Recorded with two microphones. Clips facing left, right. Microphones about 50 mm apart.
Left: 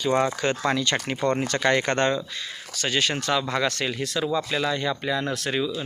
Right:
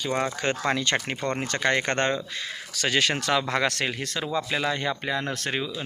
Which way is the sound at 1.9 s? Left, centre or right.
Right.